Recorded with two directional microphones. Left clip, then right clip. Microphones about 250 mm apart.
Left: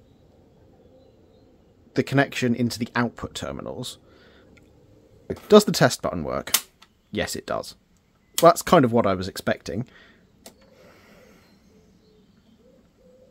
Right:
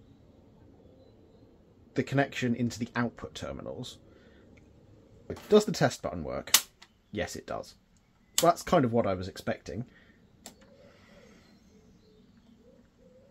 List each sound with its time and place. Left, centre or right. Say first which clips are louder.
2.0 s speech: left 7 dB; left
10.9 s mechanisms: left 5 dB; left